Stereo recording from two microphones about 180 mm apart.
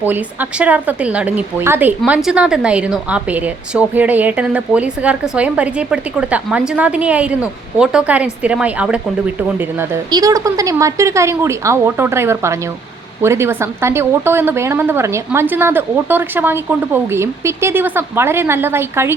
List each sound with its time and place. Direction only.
0.0 s a woman's voice: 10° right (ahead or behind)
10.1 s a woman's voice: 20° right (ahead or behind)